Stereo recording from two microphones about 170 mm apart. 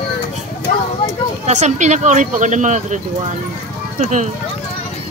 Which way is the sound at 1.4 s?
45° right (ahead or behind).